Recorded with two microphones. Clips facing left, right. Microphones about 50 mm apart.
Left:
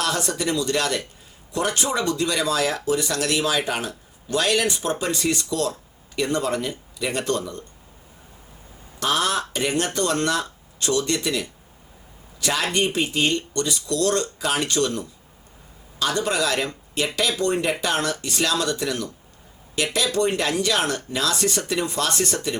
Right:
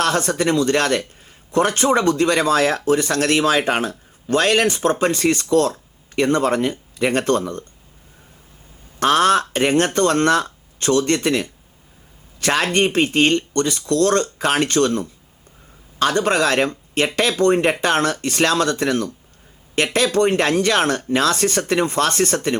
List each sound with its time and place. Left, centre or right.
0.0 s speech: right
9.0 s speech: right